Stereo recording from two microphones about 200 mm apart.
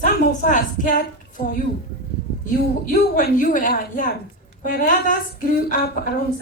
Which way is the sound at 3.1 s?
45° left (ahead or behind).